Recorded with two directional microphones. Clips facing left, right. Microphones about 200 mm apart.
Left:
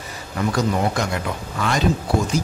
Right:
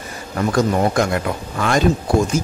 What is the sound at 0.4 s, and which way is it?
Speech, 50° right (ahead or behind).